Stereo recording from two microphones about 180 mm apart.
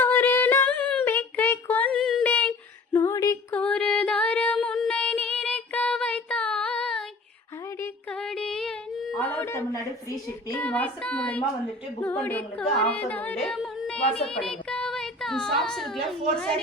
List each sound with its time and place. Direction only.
0.0 s a sound: 10° left (ahead or behind)
2.9 s female singing: 15° left (ahead or behind)
3.6 s female singing: 5° left (ahead or behind)
7.8 s a sound: 5° left (ahead or behind)
10.6 s child singing: 10° left (ahead or behind)
12.0 s speech: 10° left (ahead or behind)